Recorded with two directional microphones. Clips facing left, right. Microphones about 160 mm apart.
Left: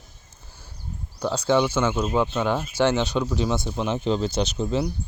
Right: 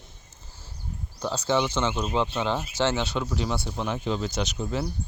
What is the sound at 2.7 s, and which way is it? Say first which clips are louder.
Speech: left 6 dB; 15° left (ahead or behind).